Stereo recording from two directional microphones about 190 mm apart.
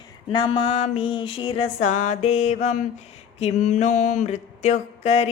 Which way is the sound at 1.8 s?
40° left (ahead or behind).